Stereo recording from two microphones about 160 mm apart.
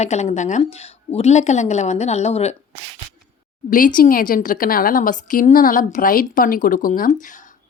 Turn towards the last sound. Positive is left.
turn(degrees=55)  # may be behind; listen again after turning